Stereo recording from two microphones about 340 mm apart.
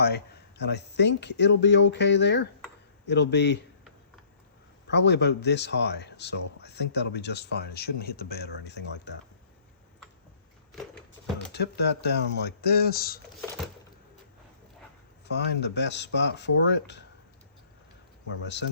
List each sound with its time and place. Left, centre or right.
0.0 s speech: left
4.9 s speech: left
11.3 s speech: left
15.3 s speech: left